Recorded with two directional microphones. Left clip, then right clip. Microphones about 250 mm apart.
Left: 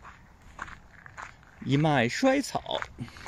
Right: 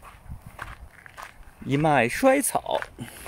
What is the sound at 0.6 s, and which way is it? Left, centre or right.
Walk, centre.